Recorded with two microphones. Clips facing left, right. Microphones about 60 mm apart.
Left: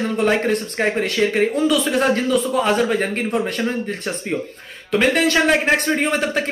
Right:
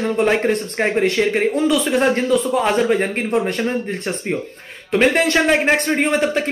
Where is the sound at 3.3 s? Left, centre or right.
Right.